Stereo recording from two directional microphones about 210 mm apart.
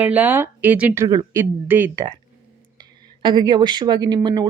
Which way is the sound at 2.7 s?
20° right (ahead or behind).